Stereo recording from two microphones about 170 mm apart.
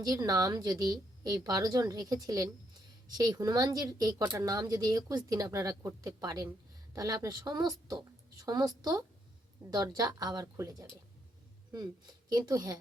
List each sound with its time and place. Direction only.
0.0 s a woman's voice: 20° right (ahead or behind)